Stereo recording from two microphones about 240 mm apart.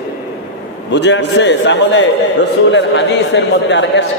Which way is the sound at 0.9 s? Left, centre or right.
Left.